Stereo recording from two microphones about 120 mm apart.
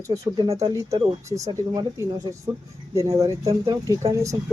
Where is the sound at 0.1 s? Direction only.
35° right (ahead or behind).